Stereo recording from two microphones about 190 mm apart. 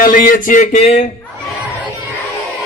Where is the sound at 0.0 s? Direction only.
45° left (ahead or behind).